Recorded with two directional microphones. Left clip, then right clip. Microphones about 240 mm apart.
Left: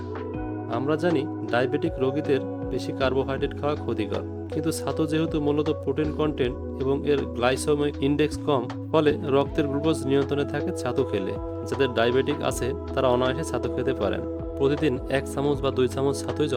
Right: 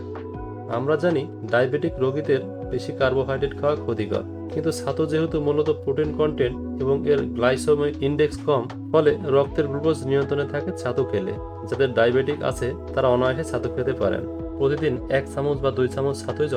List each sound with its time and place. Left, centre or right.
0.7 s speech: left